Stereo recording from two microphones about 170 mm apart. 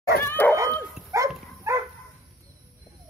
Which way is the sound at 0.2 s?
10° left (ahead or behind).